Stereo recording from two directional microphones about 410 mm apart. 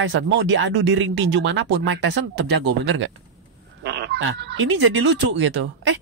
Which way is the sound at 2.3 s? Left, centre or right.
Right.